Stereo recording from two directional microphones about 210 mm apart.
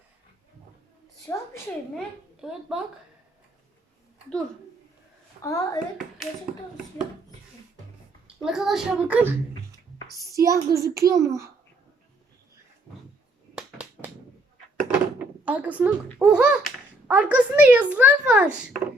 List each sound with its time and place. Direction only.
1.3 s a woman's voice: 10° left (ahead or behind)
2.4 s a child's voice: centre (ahead or behind)
5.4 s a woman's voice: 15° left (ahead or behind)
8.4 s a child's voice: centre (ahead or behind)
10.3 s a woman's voice: 15° right (ahead or behind)
13.6 s a sound: 5° right (ahead or behind)
14.9 s door: 10° right (ahead or behind)
16.1 s a child's voice: 5° right (ahead or behind)